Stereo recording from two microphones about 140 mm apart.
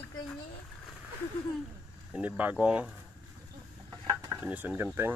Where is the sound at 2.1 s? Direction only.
10° right (ahead or behind).